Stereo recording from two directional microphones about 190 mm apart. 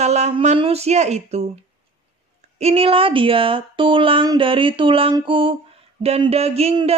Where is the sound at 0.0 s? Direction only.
35° right (ahead or behind).